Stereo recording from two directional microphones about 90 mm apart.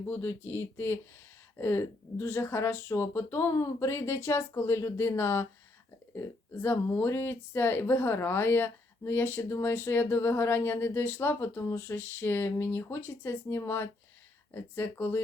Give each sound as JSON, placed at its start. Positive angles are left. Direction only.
{"t": 0.1, "sound": "speech", "side_deg": 25}